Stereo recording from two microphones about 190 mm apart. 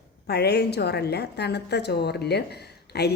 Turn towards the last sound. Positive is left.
turn(degrees=60)  # may be behind; listen again after turning